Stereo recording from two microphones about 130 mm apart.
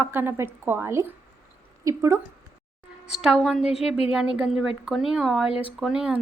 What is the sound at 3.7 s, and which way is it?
Speech, 50° left (ahead or behind).